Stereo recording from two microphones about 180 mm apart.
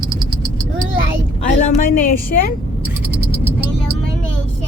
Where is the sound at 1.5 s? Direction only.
50° left (ahead or behind).